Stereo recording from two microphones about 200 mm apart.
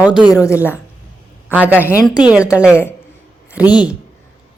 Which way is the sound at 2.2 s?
5° right (ahead or behind).